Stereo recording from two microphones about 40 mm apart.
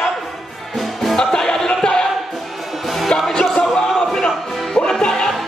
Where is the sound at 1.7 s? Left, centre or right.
Centre.